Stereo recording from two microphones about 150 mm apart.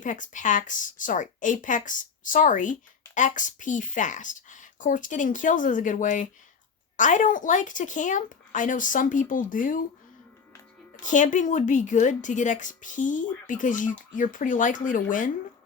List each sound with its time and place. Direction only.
0.0 s a woman's voice: 60° left (ahead or behind)
11.0 s a woman's voice: 55° left (ahead or behind)